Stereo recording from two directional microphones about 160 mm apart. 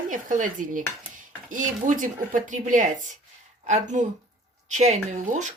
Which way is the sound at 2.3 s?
55° right (ahead or behind).